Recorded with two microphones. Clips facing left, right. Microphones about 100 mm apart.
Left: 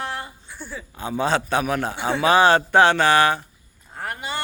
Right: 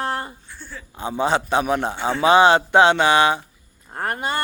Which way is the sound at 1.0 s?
20° right (ahead or behind).